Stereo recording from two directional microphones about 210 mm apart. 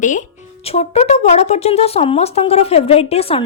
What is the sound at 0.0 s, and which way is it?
Speech, 35° left (ahead or behind).